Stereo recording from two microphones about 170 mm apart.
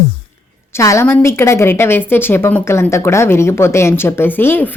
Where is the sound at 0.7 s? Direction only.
15° left (ahead or behind).